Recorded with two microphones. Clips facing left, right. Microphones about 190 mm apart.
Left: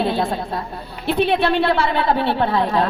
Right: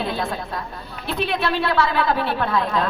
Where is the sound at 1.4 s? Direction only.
25° left (ahead or behind).